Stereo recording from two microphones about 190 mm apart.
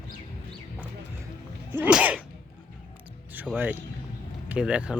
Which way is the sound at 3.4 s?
10° right (ahead or behind).